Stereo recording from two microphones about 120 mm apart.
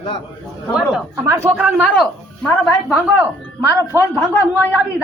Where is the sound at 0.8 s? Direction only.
5° right (ahead or behind).